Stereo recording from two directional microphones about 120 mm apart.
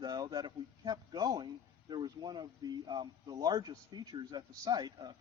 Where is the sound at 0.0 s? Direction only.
35° right (ahead or behind).